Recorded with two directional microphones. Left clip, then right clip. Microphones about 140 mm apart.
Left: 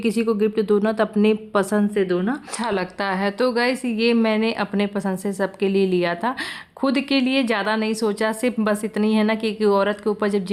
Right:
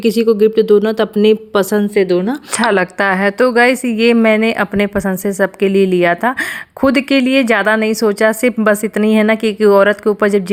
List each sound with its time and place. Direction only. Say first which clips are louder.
0.0 s speech: right 10 dB; 25° right (ahead or behind)
2.6 s a woman's voice: right 13 dB; 55° right (ahead or behind)